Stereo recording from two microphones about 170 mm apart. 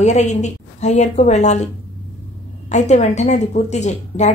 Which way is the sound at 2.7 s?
45° left (ahead or behind).